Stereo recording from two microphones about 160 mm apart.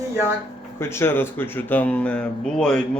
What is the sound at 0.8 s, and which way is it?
Speech, 15° left (ahead or behind).